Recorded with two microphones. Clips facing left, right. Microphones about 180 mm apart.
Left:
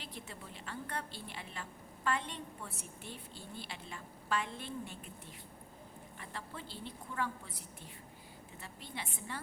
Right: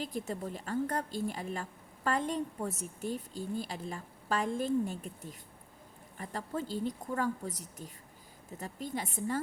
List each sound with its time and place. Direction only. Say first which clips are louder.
0.0 s a woman's voice: right 12 dB; 45° right (ahead or behind)